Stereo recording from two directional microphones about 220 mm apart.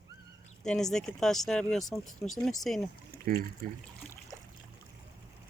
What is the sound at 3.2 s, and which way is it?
Speech, 40° right (ahead or behind).